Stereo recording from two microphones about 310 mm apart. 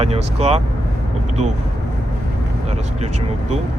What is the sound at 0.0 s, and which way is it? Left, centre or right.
Speech, centre.